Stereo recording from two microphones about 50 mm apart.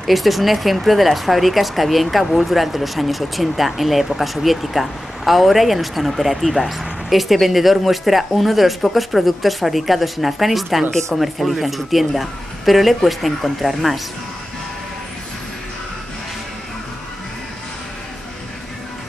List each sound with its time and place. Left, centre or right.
0.0 s speech: centre